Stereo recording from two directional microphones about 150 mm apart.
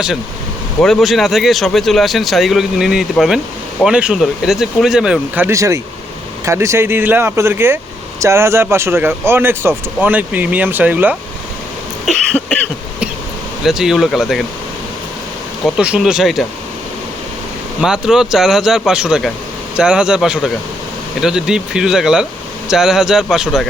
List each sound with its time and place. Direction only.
0.8 s speech: centre (ahead or behind)
12.0 s cough: 5° left (ahead or behind)
13.7 s speech: centre (ahead or behind)
15.6 s speech: 5° right (ahead or behind)
17.7 s speech: 5° right (ahead or behind)